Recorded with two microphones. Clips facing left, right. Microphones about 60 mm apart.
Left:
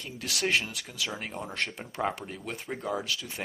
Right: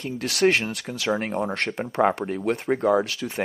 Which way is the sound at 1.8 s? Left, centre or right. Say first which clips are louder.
Right 15 dB; right.